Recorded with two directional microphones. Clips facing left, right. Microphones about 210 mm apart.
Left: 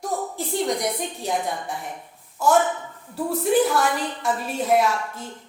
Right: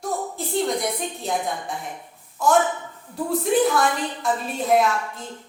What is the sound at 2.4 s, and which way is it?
A woman's voice, 10° left (ahead or behind).